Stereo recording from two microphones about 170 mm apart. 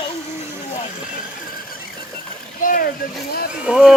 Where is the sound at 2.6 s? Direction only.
55° left (ahead or behind).